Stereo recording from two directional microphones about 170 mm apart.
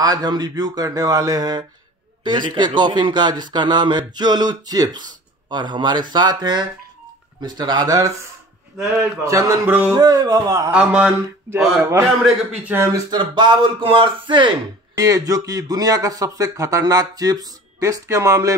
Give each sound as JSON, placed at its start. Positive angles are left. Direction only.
{"t": 0.0, "sound": "speech", "side_deg": -25}
{"t": 9.2, "sound": "a man's voice", "side_deg": -20}
{"t": 9.9, "sound": "speech", "side_deg": -25}
{"t": 10.7, "sound": "a man's voice", "side_deg": -5}